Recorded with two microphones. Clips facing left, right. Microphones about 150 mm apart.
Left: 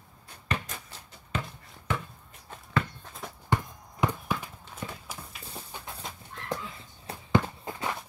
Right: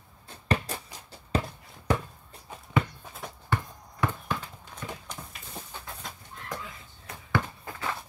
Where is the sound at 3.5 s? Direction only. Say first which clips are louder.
Left 2 dB; 20° left (ahead or behind).